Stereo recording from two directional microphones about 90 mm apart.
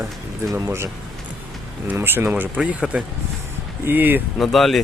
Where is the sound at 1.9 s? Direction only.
25° right (ahead or behind).